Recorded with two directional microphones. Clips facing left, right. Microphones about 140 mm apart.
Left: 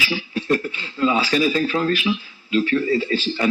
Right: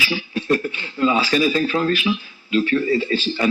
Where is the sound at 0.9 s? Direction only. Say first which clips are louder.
Right 1 dB; 25° right (ahead or behind).